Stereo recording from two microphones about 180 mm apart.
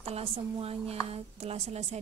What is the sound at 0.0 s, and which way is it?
A woman's voice, 35° right (ahead or behind).